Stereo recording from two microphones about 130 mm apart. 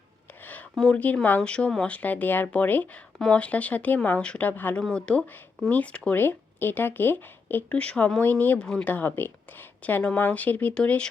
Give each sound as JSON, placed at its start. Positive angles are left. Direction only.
{"t": 0.4, "sound": "speech", "side_deg": 10}